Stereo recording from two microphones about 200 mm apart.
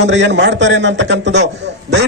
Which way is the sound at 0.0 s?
60° right (ahead or behind).